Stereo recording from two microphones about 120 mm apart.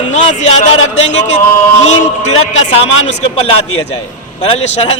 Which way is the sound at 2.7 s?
60° left (ahead or behind).